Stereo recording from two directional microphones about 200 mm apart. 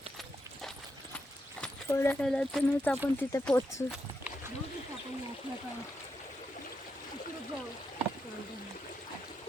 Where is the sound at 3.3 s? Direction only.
15° left (ahead or behind).